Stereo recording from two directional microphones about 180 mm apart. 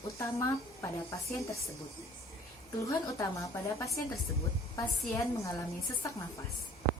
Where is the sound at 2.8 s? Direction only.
15° left (ahead or behind).